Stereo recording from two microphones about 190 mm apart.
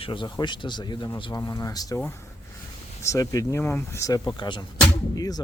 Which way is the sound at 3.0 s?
15° left (ahead or behind).